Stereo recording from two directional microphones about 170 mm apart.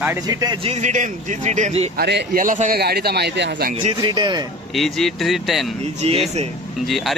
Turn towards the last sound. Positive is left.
turn(degrees=0)  # may be behind; listen again after turning